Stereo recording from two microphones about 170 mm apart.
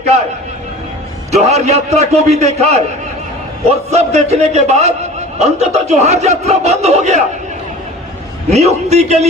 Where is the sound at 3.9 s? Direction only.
40° right (ahead or behind).